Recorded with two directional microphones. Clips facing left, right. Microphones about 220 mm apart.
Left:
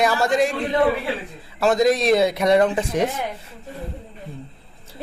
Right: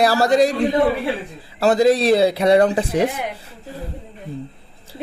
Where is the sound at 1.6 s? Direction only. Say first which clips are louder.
Right 3 dB; 30° right (ahead or behind).